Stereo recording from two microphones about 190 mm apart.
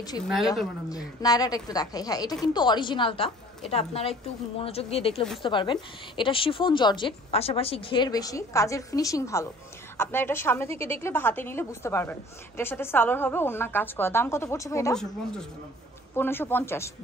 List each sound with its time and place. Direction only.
0.2 s speech: centre (ahead or behind)
0.8 s a woman's voice: 20° left (ahead or behind)
16.2 s a woman's voice: 10° left (ahead or behind)